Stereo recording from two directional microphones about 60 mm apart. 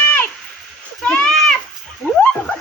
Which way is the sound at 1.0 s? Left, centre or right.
Centre.